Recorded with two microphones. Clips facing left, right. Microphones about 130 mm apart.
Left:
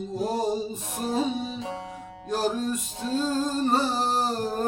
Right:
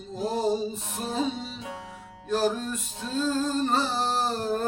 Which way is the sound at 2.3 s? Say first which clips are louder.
Even; 15° left (ahead or behind).